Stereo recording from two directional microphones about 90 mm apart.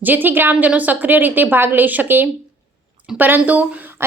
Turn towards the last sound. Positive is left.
turn(degrees=-20)  # may be behind; listen again after turning